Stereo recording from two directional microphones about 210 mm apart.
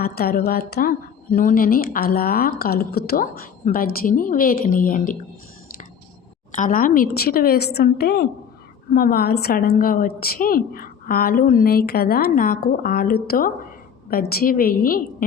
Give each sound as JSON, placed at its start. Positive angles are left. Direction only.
{"t": 0.0, "sound": "a woman's voice", "side_deg": 45}
{"t": 6.5, "sound": "a woman's voice", "side_deg": 35}